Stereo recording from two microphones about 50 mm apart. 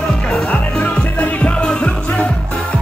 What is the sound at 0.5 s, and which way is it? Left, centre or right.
Music, left.